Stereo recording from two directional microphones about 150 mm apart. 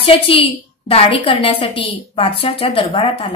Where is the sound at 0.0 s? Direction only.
35° left (ahead or behind).